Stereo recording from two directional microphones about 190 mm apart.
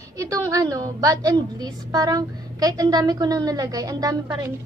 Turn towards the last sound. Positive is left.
turn(degrees=-20)  # may be behind; listen again after turning